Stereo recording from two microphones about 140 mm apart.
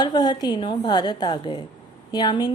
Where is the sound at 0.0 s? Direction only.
30° left (ahead or behind).